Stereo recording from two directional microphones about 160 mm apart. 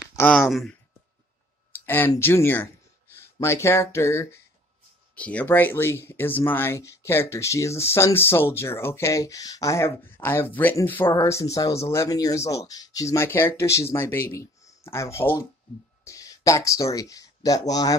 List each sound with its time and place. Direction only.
0.1 s speech: 10° left (ahead or behind)
0.5 s speech: centre (ahead or behind)
1.9 s speech: 15° left (ahead or behind)